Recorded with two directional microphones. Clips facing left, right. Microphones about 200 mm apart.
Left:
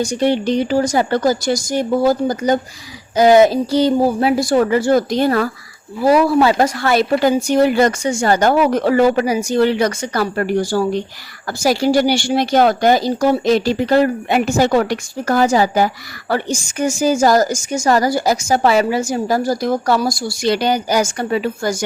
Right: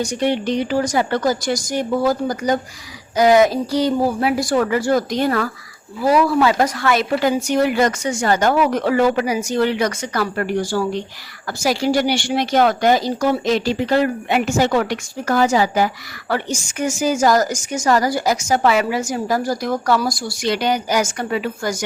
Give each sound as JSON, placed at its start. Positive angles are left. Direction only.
{"t": 0.0, "sound": "a woman's voice", "side_deg": 30}